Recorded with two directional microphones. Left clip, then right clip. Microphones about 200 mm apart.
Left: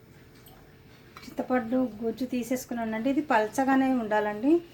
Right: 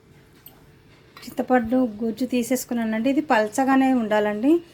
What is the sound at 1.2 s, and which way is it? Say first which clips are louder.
A woman's voice: right 8 dB; 35° right (ahead or behind).